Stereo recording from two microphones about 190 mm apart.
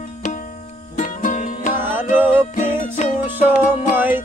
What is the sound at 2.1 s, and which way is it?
Music, 10° right (ahead or behind).